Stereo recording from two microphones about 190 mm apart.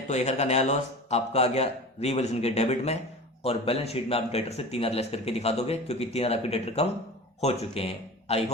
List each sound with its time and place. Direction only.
0.1 s speech: 35° left (ahead or behind)